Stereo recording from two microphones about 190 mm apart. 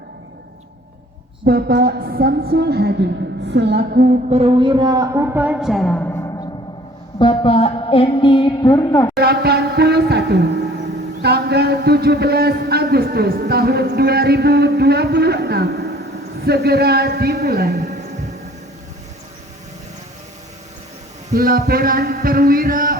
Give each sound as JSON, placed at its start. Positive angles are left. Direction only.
{"t": 1.5, "sound": "a woman's voice", "side_deg": -50}
{"t": 4.3, "sound": "a woman's voice", "side_deg": -30}
{"t": 7.2, "sound": "a woman's voice", "side_deg": 25}
{"t": 9.1, "sound": "a sound", "side_deg": -55}
{"t": 11.2, "sound": "a man's voice", "side_deg": -60}
{"t": 21.3, "sound": "a woman's voice", "side_deg": -50}